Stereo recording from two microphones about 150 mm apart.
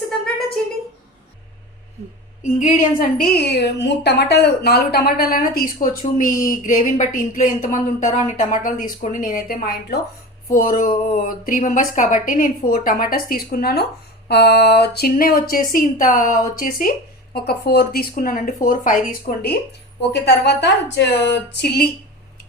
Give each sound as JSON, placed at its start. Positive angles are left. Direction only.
{"t": 2.4, "sound": "a woman's voice", "side_deg": 55}
{"t": 10.5, "sound": "a woman's voice", "side_deg": 65}
{"t": 17.3, "sound": "speech", "side_deg": 90}
{"t": 20.1, "sound": "speech", "side_deg": 90}